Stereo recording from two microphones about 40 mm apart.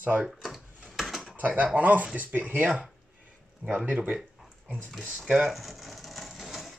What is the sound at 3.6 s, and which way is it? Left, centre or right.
Speech, left.